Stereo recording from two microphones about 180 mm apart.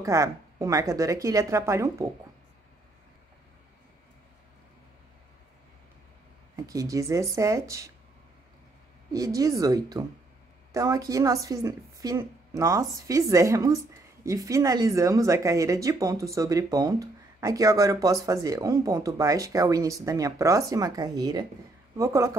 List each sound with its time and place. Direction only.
0.0 s a woman's voice: 15° right (ahead or behind)
6.5 s a woman's voice: 20° right (ahead or behind)
9.1 s a woman's voice: 20° right (ahead or behind)